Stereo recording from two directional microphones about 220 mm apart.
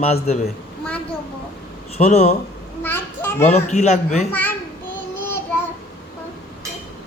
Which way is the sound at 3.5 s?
30° left (ahead or behind).